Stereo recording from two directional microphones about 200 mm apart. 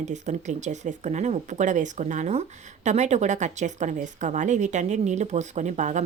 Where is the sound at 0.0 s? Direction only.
35° right (ahead or behind).